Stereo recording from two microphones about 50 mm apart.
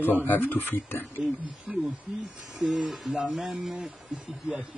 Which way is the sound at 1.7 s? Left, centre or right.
Centre.